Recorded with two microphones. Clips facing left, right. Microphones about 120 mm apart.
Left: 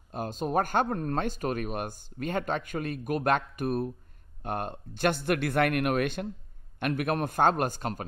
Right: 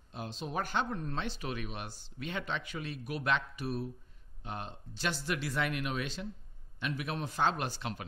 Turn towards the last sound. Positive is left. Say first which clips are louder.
# left 7 dB
turn(degrees=45)  # may be behind; listen again after turning